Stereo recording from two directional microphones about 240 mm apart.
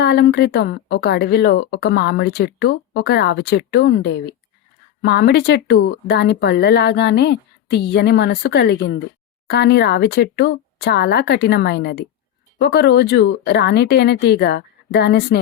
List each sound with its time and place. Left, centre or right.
0.0 s speech: left